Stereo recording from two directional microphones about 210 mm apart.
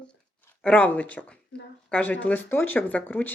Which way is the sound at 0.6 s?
5° left (ahead or behind).